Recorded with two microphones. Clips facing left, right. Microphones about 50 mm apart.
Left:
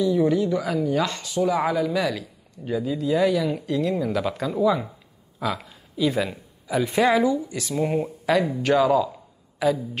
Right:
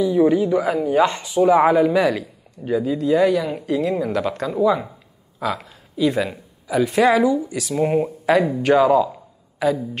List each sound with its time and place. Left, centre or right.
0.3 s speech: centre
2.6 s speech: centre
7.7 s speech: centre